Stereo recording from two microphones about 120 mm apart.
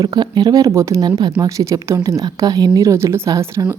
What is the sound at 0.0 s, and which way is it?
A woman's voice, 35° right (ahead or behind).